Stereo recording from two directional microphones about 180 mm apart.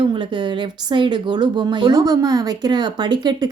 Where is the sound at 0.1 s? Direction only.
25° right (ahead or behind).